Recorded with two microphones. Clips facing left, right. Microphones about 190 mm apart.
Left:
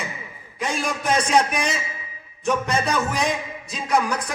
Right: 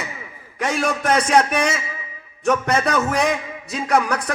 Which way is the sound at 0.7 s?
65° right (ahead or behind).